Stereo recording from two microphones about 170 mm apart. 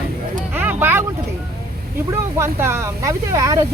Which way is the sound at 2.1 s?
15° right (ahead or behind).